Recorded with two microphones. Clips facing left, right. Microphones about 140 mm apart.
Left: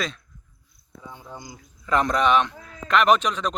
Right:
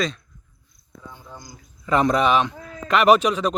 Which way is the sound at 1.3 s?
20° left (ahead or behind).